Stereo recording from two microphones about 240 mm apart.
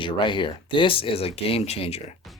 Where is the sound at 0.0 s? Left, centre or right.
Centre.